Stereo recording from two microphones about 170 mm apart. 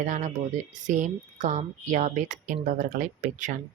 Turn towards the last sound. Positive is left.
turn(degrees=-50)  # may be behind; listen again after turning